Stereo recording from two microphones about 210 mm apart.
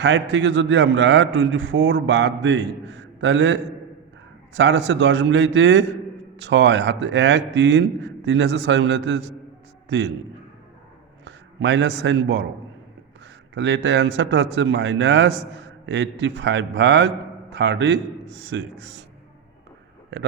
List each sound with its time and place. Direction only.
0.0 s a man's voice: 55° right (ahead or behind)
11.3 s a man's voice: 55° right (ahead or behind)
13.5 s a man's voice: 60° right (ahead or behind)